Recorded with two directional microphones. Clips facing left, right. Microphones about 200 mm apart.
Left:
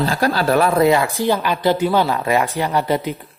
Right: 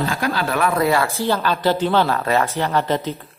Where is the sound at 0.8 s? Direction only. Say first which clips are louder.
Left 4 dB; 20° left (ahead or behind).